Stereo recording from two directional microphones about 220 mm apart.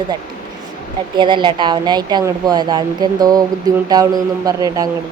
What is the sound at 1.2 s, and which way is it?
A man's voice, 20° right (ahead or behind).